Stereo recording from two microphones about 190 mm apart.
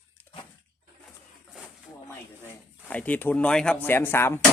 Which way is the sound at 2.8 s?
10° left (ahead or behind).